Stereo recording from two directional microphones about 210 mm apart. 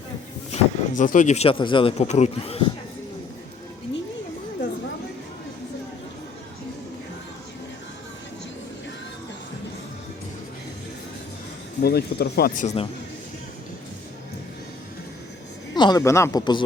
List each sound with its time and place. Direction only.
0.5 s speech: 40° left (ahead or behind)
11.8 s speech: 50° left (ahead or behind)
12.6 s speech: 25° left (ahead or behind)
15.7 s speech: 20° left (ahead or behind)